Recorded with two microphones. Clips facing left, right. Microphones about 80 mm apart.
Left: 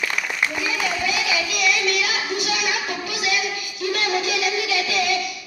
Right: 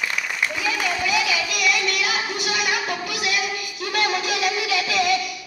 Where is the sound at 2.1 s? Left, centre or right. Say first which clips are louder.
Even; right.